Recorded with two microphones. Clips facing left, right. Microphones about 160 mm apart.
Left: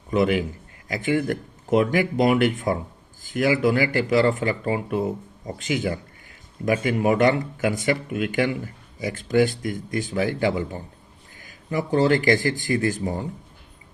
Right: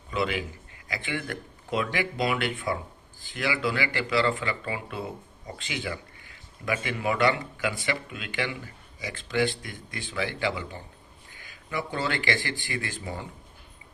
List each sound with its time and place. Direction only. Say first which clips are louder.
0.1 s speech: left 8 dB; 45° left (ahead or behind)